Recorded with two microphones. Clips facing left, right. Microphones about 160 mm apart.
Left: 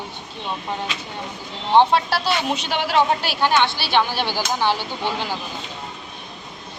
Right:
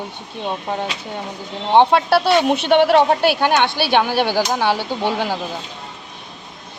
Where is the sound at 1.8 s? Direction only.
60° right (ahead or behind).